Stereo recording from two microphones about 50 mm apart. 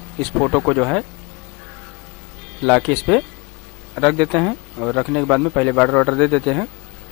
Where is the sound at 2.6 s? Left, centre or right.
Centre.